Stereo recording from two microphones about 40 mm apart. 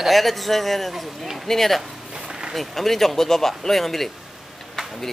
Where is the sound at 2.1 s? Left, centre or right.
Centre.